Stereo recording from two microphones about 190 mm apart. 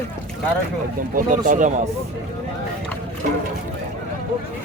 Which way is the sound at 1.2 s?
40° right (ahead or behind).